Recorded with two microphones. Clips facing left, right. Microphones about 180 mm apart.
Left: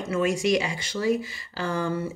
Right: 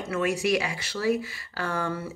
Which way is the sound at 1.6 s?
25° left (ahead or behind).